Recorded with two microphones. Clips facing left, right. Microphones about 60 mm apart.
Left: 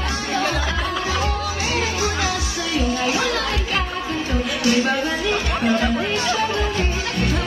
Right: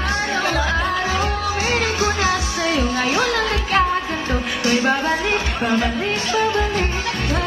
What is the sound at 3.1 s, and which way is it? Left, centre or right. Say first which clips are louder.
Music: right 2 dB; right.